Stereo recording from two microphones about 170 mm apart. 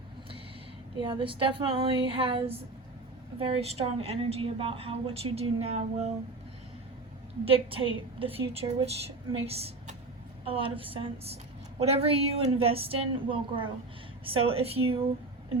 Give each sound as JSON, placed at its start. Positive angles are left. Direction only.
{"t": 0.9, "sound": "a woman's voice", "side_deg": -30}
{"t": 7.4, "sound": "a woman's voice", "side_deg": -35}